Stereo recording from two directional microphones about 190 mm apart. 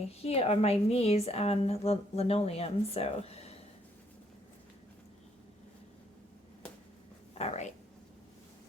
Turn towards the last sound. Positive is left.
turn(degrees=35)  # may be behind; listen again after turning